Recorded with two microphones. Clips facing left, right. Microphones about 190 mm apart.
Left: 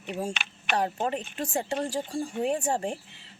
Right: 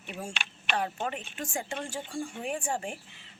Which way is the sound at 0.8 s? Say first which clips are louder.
Left 5 dB; 35° left (ahead or behind).